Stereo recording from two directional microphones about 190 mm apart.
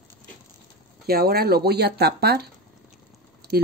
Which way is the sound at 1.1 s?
55° right (ahead or behind).